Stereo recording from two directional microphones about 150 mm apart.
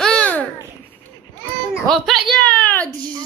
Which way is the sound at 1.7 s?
Centre (ahead or behind).